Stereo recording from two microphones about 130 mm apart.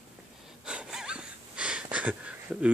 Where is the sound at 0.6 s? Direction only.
5° right (ahead or behind).